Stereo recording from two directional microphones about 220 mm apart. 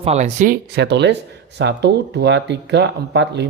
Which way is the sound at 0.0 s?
30° right (ahead or behind).